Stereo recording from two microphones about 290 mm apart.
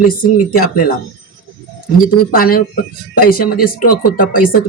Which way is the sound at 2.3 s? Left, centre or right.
Left.